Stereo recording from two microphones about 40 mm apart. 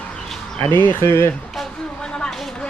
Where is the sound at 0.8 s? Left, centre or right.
Left.